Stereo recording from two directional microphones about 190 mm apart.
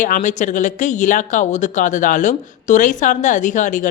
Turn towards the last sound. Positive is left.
turn(degrees=40)  # may be behind; listen again after turning